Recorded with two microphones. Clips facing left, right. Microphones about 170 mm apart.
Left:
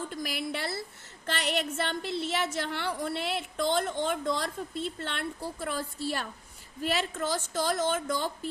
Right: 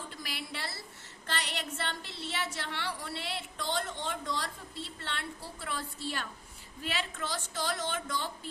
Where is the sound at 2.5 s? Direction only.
50° left (ahead or behind).